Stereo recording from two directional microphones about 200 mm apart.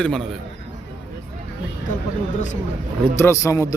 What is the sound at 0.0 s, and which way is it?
Speech, 5° left (ahead or behind).